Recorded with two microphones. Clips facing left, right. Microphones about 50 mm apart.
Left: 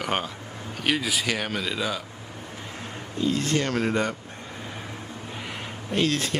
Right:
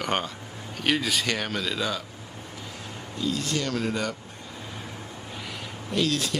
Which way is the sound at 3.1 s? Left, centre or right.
Left.